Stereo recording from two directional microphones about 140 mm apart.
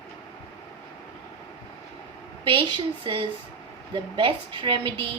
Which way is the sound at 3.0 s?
40° right (ahead or behind).